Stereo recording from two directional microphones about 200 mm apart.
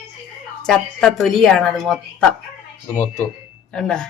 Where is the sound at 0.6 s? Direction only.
5° left (ahead or behind).